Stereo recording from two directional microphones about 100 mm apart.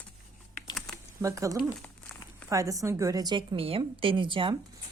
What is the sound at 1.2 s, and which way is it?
Speech, 35° right (ahead or behind).